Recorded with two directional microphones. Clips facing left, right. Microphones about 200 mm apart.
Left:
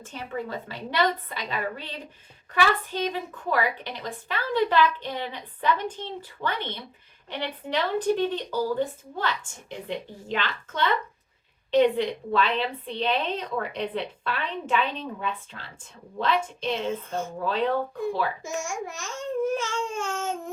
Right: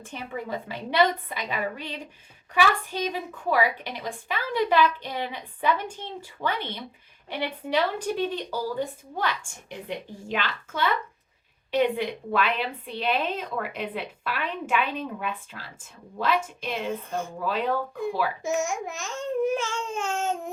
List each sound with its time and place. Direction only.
0.0 s speech: 15° right (ahead or behind)